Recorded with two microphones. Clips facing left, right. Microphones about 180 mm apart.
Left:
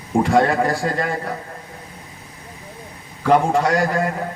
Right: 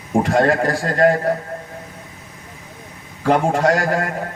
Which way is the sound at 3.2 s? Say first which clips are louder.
Even; 50° right (ahead or behind).